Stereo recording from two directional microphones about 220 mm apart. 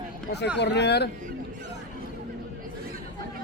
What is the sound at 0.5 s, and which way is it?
Speech, 50° left (ahead or behind).